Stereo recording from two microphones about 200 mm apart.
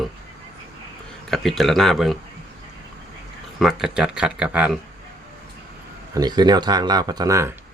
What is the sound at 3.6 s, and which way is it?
Speech, 5° right (ahead or behind).